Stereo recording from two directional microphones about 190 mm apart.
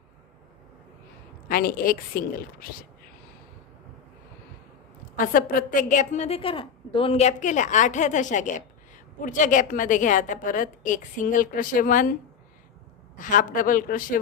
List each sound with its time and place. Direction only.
1.5 s a woman's voice: 50° left (ahead or behind)
5.1 s a woman's voice: 45° left (ahead or behind)
13.1 s a woman's voice: 45° left (ahead or behind)